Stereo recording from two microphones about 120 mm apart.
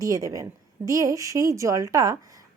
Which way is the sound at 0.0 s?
30° right (ahead or behind).